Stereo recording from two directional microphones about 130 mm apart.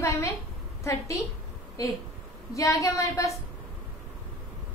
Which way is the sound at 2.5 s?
25° left (ahead or behind).